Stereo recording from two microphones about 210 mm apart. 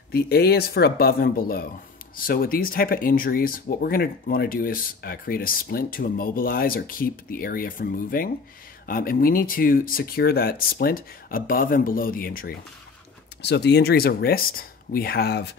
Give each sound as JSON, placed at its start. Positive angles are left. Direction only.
{"t": 0.1, "sound": "speech", "side_deg": 50}
{"t": 13.4, "sound": "speech", "side_deg": 55}